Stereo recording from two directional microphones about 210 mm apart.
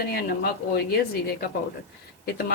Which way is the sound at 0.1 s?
50° left (ahead or behind).